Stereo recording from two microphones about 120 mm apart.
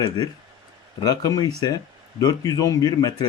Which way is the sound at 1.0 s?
30° left (ahead or behind).